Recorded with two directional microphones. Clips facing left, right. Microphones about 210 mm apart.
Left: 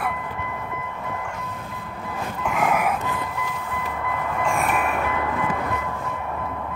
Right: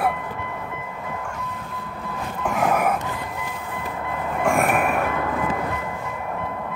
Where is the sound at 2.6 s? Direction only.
45° right (ahead or behind).